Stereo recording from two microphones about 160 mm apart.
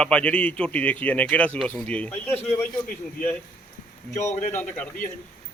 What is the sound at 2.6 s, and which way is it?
Speech, 65° left (ahead or behind).